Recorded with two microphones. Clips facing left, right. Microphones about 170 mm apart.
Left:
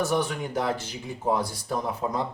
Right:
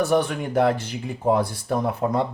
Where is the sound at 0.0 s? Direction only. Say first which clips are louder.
Right 5 dB; 60° right (ahead or behind).